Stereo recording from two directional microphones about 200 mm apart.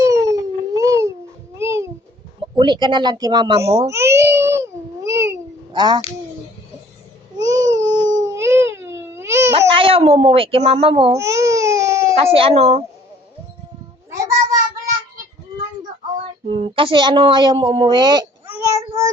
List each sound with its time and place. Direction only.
0.0 s a sound: 15° right (ahead or behind)
1.5 s babbling: 15° right (ahead or behind)
2.6 s a woman's voice: 20° right (ahead or behind)
3.8 s babbling: 15° right (ahead or behind)
7.4 s baby cry: 15° right (ahead or behind)
9.6 s speech: 25° right (ahead or behind)
11.2 s baby cry: 15° right (ahead or behind)
12.2 s a woman's voice: 30° right (ahead or behind)
14.1 s cat: 15° right (ahead or behind)
16.5 s a woman's voice: 25° right (ahead or behind)
18.4 s child singing: 10° right (ahead or behind)